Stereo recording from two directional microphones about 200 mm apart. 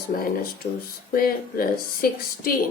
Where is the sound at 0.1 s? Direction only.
45° left (ahead or behind).